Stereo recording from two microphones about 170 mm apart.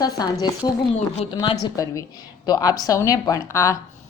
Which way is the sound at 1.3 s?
20° left (ahead or behind).